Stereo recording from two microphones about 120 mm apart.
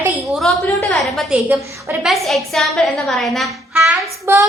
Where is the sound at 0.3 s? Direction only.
Centre (ahead or behind).